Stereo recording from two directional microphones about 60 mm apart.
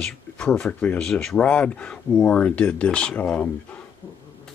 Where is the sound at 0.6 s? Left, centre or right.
Left.